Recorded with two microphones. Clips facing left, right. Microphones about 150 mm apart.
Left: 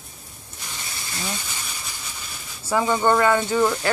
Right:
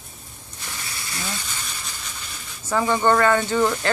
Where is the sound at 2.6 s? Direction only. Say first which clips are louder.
Even; 10° left (ahead or behind).